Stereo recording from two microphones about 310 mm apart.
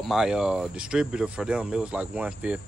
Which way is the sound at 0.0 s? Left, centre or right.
Centre.